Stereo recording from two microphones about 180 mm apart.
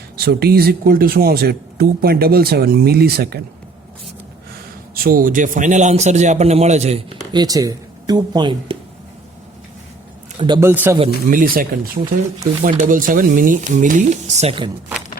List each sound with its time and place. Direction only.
0.2 s speech: 60° right (ahead or behind)
4.9 s a man's voice: 55° right (ahead or behind); by 7.0 s 35° right (ahead or behind)
7.3 s speech: 20° right (ahead or behind)
10.6 s speech: 15° right (ahead or behind)
11.1 s speech: 50° right (ahead or behind); by 14.7 s 30° right (ahead or behind)